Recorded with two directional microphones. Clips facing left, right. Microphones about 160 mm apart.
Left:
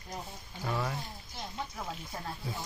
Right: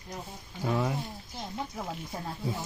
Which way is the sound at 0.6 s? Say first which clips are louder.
Right 5 dB; 20° right (ahead or behind).